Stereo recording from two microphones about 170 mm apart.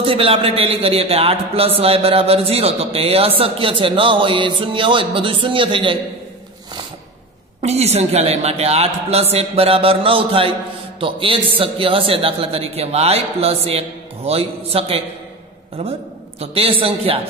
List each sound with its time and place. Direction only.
0.0 s a man's voice: 30° right (ahead or behind)
7.6 s a man's voice: 40° right (ahead or behind)